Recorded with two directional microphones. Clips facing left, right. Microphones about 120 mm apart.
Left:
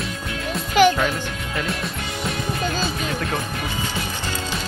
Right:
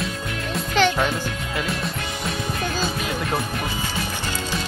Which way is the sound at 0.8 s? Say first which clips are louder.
Left 5 dB; 10° left (ahead or behind).